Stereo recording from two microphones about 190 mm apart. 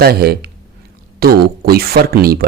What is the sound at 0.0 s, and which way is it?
Speech, 55° right (ahead or behind).